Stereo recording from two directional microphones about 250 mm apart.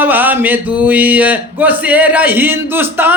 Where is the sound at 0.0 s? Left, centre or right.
Centre.